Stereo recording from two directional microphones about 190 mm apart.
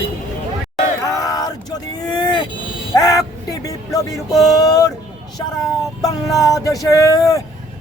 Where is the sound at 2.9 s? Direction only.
20° left (ahead or behind).